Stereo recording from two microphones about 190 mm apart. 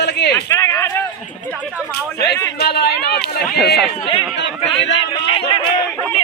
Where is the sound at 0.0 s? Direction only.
60° left (ahead or behind).